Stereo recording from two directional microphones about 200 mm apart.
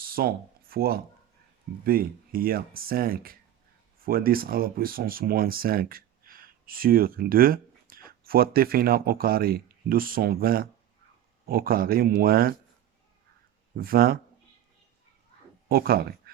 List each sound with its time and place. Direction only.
0.0 s speech: 45° right (ahead or behind)
13.7 s speech: 50° right (ahead or behind)
15.7 s speech: 50° right (ahead or behind)